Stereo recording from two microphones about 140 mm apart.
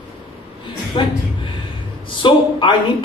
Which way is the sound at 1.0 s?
35° left (ahead or behind).